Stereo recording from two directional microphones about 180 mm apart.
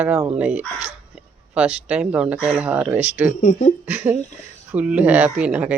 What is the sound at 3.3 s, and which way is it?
Speech, 45° left (ahead or behind).